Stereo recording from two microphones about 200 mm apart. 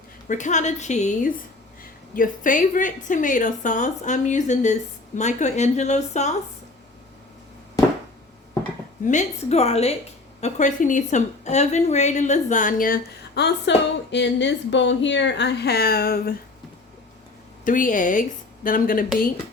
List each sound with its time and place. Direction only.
0.3 s a woman's voice: 40° left (ahead or behind)
9.0 s a woman's voice: 35° left (ahead or behind)
17.7 s a woman's voice: 40° left (ahead or behind)